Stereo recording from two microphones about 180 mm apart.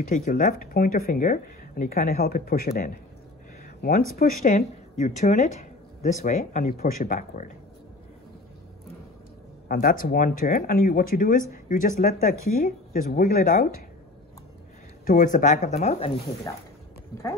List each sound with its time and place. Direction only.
0.0 s speech: 45° left (ahead or behind)
4.4 s speech: 40° left (ahead or behind)
9.7 s speech: 55° left (ahead or behind)
15.0 s speech: 50° left (ahead or behind)